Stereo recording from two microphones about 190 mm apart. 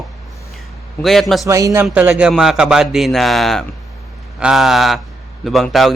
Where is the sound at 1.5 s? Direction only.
15° right (ahead or behind).